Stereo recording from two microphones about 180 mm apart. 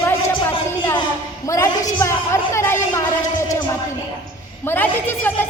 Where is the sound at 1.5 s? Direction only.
15° left (ahead or behind).